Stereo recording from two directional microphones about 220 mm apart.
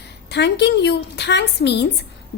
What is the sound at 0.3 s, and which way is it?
A woman's voice, 50° left (ahead or behind).